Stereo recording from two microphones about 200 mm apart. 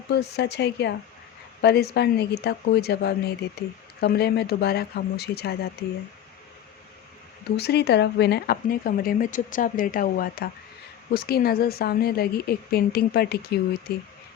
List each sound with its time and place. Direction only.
0.1 s speech: 55° left (ahead or behind)
7.5 s speech: 55° left (ahead or behind)